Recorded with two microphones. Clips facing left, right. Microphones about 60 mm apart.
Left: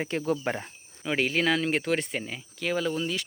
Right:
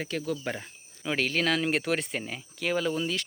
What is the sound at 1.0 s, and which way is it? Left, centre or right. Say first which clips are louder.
Speech: left 2 dB; centre.